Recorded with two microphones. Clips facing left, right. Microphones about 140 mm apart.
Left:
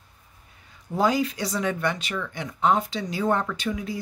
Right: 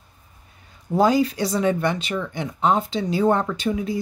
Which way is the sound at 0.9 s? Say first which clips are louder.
Right 5 dB; 35° right (ahead or behind).